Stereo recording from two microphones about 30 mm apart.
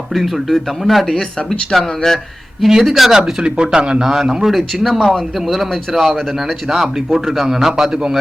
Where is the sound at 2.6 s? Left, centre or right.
Centre.